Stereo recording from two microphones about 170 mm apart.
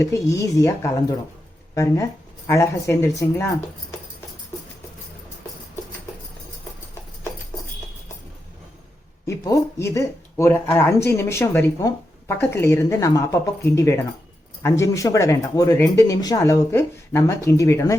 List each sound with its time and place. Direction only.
0.0 s speech: 20° left (ahead or behind)
9.2 s speech: 20° left (ahead or behind)